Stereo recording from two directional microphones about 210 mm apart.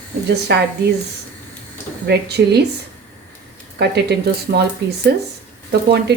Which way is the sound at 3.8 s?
50° right (ahead or behind).